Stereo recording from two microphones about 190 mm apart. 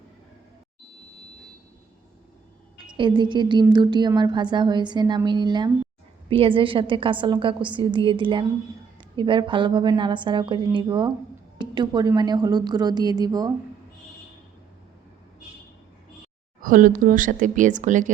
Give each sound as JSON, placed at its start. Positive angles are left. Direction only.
{"t": 2.7, "sound": "a woman's voice", "side_deg": -25}
{"t": 16.6, "sound": "speech", "side_deg": -45}